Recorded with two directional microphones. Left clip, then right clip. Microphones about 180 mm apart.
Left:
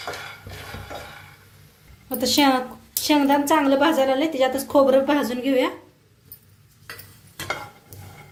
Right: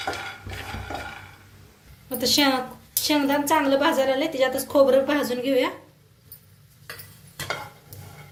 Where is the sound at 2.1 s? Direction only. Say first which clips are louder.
Left 2 dB; 50° left (ahead or behind).